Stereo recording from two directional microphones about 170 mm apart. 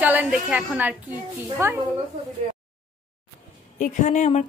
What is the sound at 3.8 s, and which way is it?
Speech, 45° left (ahead or behind).